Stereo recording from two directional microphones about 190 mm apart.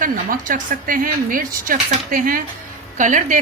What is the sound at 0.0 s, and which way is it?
Speech, 45° right (ahead or behind).